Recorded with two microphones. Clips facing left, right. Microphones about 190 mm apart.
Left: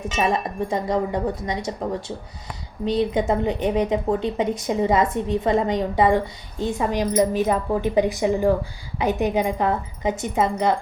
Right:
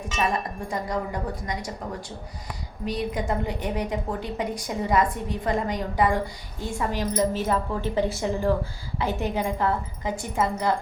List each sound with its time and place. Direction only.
0.1 s a woman's voice: 25° left (ahead or behind)